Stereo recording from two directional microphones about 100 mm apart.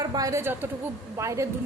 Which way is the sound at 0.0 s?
40° right (ahead or behind).